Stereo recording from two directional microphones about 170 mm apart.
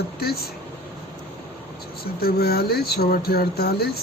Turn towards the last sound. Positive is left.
turn(degrees=70)  # may be behind; listen again after turning